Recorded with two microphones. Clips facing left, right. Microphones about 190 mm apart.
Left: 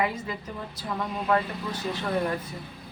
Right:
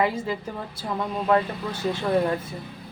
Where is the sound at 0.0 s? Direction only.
30° right (ahead or behind).